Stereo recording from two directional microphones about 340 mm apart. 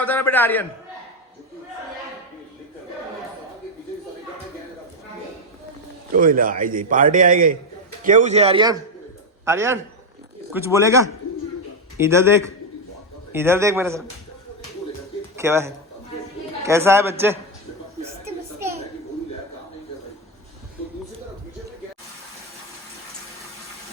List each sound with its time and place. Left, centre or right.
0.0 s a man's voice: centre
6.1 s a man's voice: right; by 14.0 s centre
15.4 s a man's voice: centre